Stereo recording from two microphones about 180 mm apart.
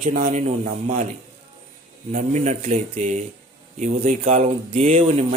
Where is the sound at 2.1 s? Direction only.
40° right (ahead or behind).